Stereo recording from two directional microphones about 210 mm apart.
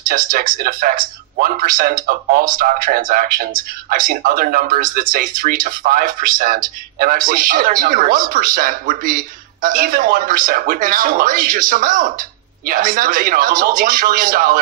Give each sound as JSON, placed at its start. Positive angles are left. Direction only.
{"t": 0.1, "sound": "speech", "side_deg": -40}